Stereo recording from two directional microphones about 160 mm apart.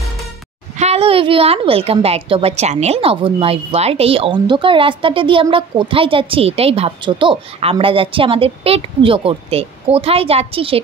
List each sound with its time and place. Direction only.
0.7 s a woman's voice: 40° right (ahead or behind)